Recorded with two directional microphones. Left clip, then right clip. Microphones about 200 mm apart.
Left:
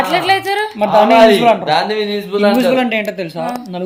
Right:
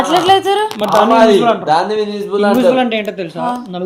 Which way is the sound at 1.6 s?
15° left (ahead or behind).